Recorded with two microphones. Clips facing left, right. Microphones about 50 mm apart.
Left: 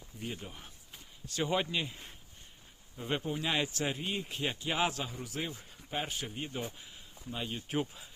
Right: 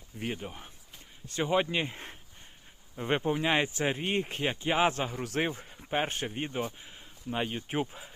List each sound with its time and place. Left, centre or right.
0.3 s speech: right
1.3 s speech: right
4.0 s speech: right
4.6 s speech: right
5.2 s speech: right
5.5 s speech: right
6.7 s a sound: right
7.5 s speech: right